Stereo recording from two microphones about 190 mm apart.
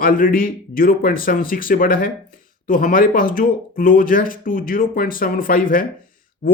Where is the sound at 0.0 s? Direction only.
50° left (ahead or behind).